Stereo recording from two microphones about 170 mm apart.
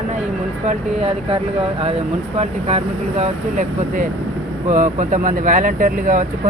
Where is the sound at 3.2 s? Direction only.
50° right (ahead or behind).